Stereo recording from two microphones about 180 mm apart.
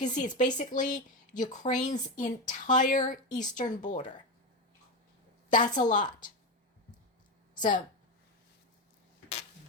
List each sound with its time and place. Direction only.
0.0 s speech: 40° left (ahead or behind)
5.5 s a woman's voice: 45° left (ahead or behind)